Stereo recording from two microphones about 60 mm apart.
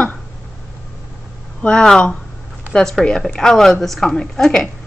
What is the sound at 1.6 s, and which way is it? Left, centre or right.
A woman's voice, centre.